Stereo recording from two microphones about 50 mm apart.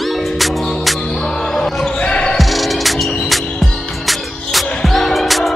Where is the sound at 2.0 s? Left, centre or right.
Left.